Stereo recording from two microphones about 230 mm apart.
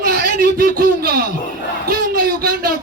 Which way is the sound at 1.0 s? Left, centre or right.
Right.